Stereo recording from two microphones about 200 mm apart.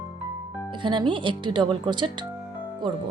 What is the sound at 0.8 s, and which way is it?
Speech, 25° right (ahead or behind).